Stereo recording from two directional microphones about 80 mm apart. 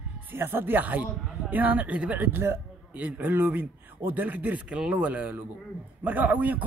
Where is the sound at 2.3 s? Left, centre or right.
Right.